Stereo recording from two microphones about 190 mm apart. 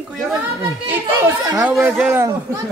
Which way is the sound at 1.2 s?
10° right (ahead or behind).